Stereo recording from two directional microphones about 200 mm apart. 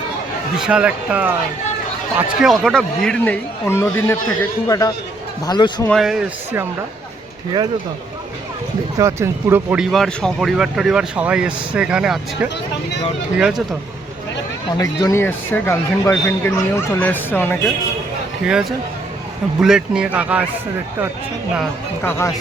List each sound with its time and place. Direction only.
0.5 s a man's voice: 5° right (ahead or behind); by 5.9 s 20° left (ahead or behind)
5.9 s speech: centre (ahead or behind)
9.0 s speech: 15° right (ahead or behind)
14.8 s a man's voice: 15° left (ahead or behind)
18.4 s a man's voice: 5° right (ahead or behind)